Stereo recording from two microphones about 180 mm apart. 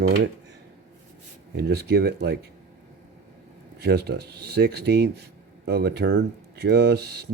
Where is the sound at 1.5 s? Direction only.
60° right (ahead or behind).